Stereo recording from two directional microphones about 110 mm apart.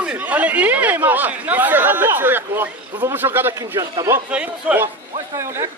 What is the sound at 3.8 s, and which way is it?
Speech, 30° right (ahead or behind).